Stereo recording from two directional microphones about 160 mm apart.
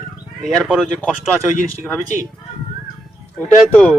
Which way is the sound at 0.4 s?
Centre (ahead or behind).